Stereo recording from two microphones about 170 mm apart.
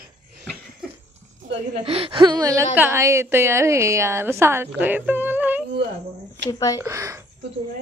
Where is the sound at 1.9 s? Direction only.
35° right (ahead or behind); by 5.7 s 10° right (ahead or behind).